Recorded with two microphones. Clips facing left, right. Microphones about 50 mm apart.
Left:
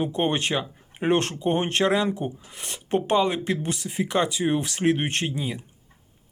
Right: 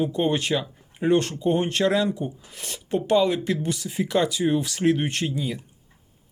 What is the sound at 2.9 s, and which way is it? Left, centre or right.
Speech, left.